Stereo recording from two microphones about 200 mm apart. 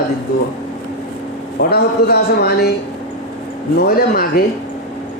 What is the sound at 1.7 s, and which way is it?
Speech, 50° left (ahead or behind).